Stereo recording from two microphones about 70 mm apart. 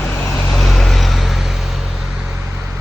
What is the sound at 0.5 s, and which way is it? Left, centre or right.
Vehicle, centre.